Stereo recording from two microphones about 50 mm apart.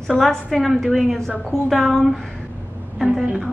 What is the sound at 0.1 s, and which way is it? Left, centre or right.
A woman's voice, centre.